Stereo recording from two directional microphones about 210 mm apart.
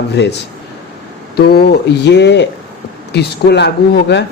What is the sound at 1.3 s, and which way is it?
Speech, 50° left (ahead or behind).